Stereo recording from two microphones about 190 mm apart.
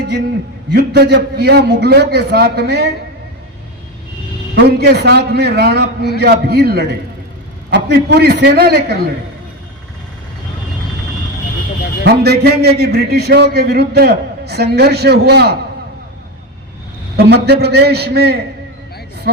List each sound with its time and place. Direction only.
0.7 s a man's voice: 60° right (ahead or behind)
4.5 s a man's voice: 60° right (ahead or behind)
12.0 s a man's voice: 60° right (ahead or behind)
17.2 s a man's voice: 60° right (ahead or behind)